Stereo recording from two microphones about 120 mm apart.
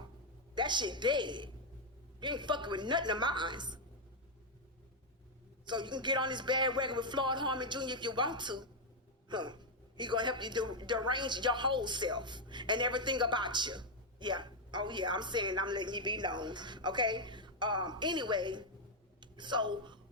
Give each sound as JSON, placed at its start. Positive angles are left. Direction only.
{"t": 0.5, "sound": "a woman's voice", "side_deg": -40}
{"t": 5.6, "sound": "a woman's voice", "side_deg": -40}